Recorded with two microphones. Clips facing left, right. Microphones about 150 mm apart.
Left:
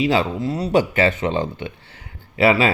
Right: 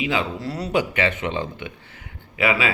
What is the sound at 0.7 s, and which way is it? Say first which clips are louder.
A man's voice: left 4 dB; 40° left (ahead or behind).